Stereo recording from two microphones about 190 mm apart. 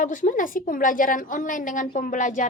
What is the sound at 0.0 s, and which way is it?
A woman's voice, 40° left (ahead or behind).